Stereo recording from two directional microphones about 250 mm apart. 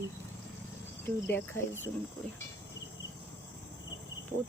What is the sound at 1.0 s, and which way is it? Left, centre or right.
Speech, centre.